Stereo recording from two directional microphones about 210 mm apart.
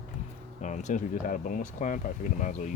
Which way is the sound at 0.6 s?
35° left (ahead or behind).